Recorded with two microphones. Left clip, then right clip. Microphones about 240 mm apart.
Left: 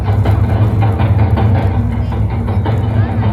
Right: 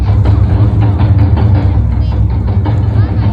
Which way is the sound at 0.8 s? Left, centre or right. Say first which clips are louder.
Even; right.